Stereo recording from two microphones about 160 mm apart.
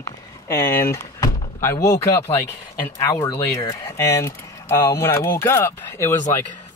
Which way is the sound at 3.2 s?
25° left (ahead or behind).